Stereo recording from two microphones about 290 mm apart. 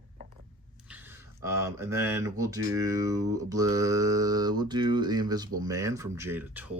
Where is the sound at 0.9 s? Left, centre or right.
Centre.